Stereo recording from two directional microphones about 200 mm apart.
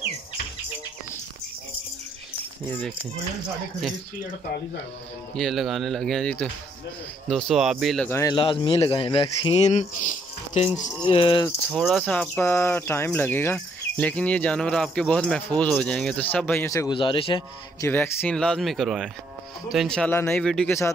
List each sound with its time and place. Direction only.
5.3 s speech: centre (ahead or behind)
8.1 s speech: 15° left (ahead or behind)
11.7 s speech: centre (ahead or behind); by 17.8 s 25° left (ahead or behind)
17.8 s speech: 10° left (ahead or behind)